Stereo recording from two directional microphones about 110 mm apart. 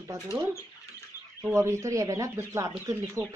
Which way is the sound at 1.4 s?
25° right (ahead or behind).